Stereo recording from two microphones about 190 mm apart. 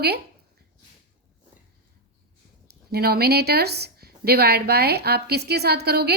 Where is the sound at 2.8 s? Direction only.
55° right (ahead or behind).